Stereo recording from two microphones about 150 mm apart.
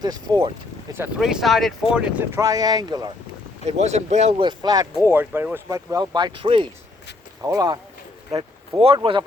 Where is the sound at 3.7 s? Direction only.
45° right (ahead or behind).